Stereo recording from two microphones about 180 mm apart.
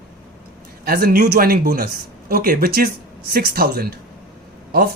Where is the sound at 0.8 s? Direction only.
55° right (ahead or behind).